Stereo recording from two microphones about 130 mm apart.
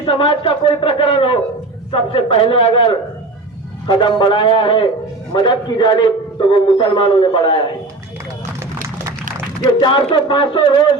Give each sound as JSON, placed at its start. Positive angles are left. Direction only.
{"t": 0.0, "sound": "a man's voice", "side_deg": 40}
{"t": 9.8, "sound": "speech", "side_deg": 40}